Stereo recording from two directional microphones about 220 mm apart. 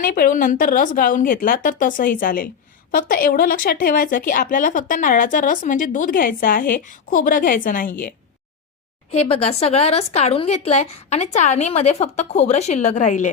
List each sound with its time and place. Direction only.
0.0 s speech: 40° left (ahead or behind)
9.1 s a woman's voice: 25° left (ahead or behind)